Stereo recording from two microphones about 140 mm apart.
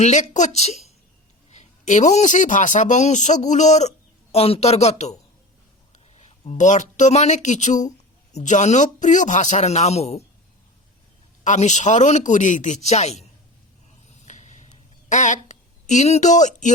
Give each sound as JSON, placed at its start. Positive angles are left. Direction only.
{"t": 0.0, "sound": "a woman's voice", "side_deg": 55}
{"t": 6.1, "sound": "a man's voice", "side_deg": 50}
{"t": 11.4, "sound": "a man's voice", "side_deg": 55}
{"t": 14.3, "sound": "vehicle", "side_deg": 55}
{"t": 15.1, "sound": "speech", "side_deg": 60}